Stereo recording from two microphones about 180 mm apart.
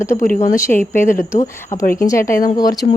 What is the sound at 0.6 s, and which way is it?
Speech, 15° left (ahead or behind).